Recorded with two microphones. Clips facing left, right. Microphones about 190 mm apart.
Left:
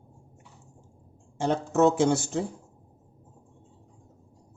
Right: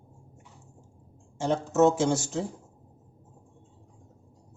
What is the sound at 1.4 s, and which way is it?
Speech, 60° left (ahead or behind).